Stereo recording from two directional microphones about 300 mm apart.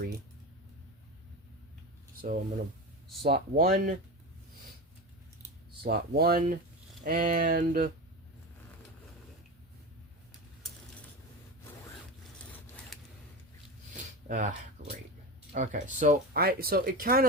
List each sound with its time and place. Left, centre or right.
2.1 s a sound: right
3.2 s speech: right
5.8 s speech: right
14.3 s speech: right
14.8 s a sound: right
15.5 s speech: right